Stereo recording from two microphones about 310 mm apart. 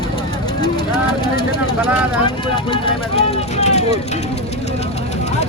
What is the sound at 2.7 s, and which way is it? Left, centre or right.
Speech, centre.